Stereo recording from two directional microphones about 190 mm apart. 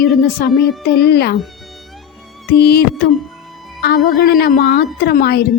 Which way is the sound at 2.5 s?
55° left (ahead or behind).